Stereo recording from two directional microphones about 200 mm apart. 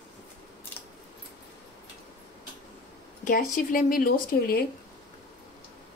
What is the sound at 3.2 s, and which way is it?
A woman's voice, 40° left (ahead or behind).